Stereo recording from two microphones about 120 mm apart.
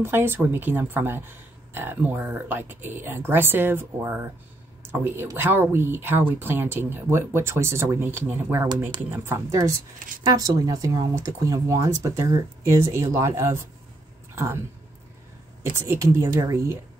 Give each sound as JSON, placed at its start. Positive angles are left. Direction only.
{"t": 0.0, "sound": "speech", "side_deg": -20}
{"t": 15.7, "sound": "speech", "side_deg": -20}